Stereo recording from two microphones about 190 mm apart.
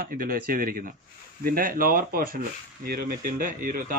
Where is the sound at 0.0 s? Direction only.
50° right (ahead or behind).